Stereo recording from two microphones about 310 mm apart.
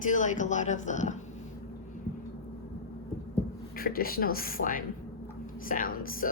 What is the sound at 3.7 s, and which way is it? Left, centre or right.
Speech, left.